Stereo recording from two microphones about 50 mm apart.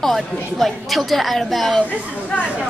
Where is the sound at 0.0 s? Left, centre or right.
Centre.